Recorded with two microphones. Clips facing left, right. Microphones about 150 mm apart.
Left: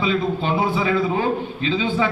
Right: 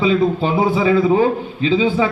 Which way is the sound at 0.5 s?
25° right (ahead or behind).